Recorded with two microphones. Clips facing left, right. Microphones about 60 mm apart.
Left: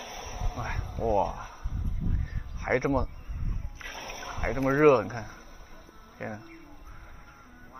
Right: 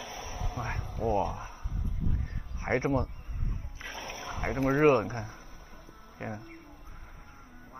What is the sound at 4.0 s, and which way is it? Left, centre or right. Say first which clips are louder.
Rowboat: even; right.